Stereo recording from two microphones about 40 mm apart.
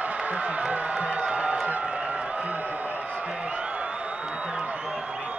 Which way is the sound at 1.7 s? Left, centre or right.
Right.